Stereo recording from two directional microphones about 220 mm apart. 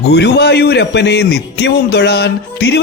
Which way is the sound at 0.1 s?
50° left (ahead or behind).